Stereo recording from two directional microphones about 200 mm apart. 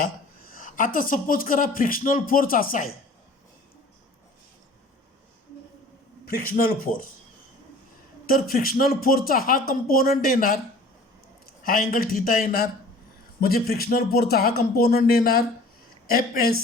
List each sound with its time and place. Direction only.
0.5 s speech: 40° left (ahead or behind)
6.2 s speech: 45° left (ahead or behind)
8.3 s speech: 45° left (ahead or behind)
11.6 s speech: 45° left (ahead or behind)